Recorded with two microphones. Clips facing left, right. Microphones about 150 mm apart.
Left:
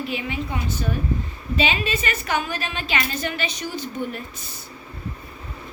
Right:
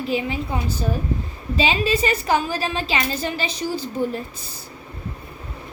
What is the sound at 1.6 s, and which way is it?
A woman's voice, 35° right (ahead or behind).